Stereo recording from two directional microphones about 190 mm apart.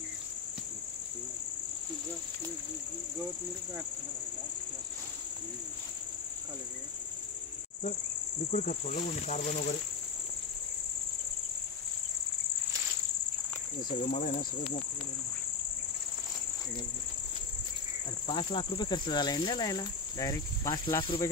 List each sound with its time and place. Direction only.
8.5 s speech: 40° left (ahead or behind)
14.0 s speech: 35° left (ahead or behind)
18.2 s cricket: 25° left (ahead or behind)